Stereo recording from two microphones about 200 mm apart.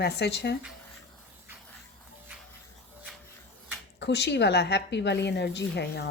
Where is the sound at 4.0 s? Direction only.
60° left (ahead or behind).